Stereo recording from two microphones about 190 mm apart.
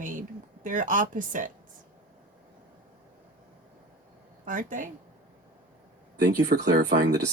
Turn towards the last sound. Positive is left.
turn(degrees=-55)  # may be behind; listen again after turning